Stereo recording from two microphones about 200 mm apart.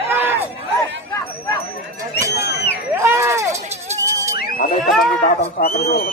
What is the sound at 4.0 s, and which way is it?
Music, 15° right (ahead or behind).